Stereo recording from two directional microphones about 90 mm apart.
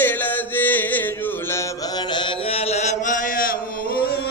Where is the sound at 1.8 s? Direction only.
50° left (ahead or behind); by 2.6 s 90° left.